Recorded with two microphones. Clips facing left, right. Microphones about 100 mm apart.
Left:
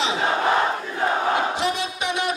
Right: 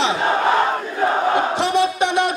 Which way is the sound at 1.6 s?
55° right (ahead or behind).